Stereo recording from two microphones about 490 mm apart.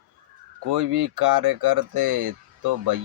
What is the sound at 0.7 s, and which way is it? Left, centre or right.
Speech, right.